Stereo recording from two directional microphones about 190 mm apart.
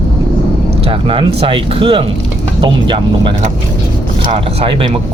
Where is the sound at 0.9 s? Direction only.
30° right (ahead or behind).